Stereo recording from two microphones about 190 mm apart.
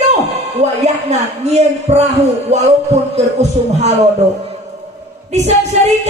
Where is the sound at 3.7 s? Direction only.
35° right (ahead or behind).